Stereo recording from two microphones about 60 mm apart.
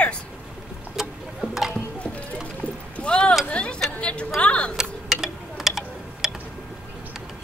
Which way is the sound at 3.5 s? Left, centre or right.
Centre.